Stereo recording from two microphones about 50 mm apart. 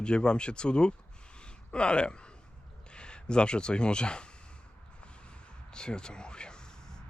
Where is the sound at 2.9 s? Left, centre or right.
Centre.